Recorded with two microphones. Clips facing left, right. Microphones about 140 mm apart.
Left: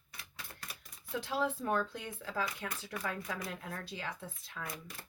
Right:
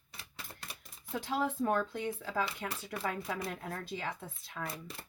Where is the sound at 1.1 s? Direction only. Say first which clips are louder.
Right 1 dB; 50° right (ahead or behind).